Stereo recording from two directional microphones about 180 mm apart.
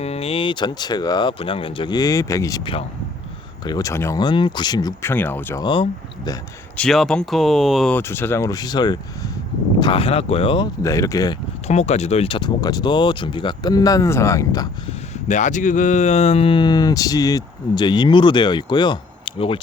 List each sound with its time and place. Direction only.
0.0 s speech: 35° left (ahead or behind); by 5.6 s 10° left (ahead or behind)
5.6 s speech: 25° left (ahead or behind)
6.7 s speech: centre (ahead or behind)
7.9 s speech: 10° left (ahead or behind); by 10.7 s 30° left (ahead or behind)
10.8 s speech: 20° left (ahead or behind)
11.7 s speech: 40° left (ahead or behind); by 14.7 s 20° left (ahead or behind)
15.3 s speech: 45° left (ahead or behind)